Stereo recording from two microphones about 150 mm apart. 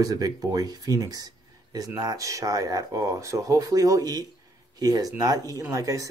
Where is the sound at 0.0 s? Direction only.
25° right (ahead or behind).